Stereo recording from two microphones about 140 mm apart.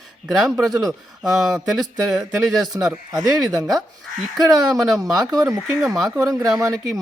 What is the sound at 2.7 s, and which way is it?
Speech, 20° right (ahead or behind).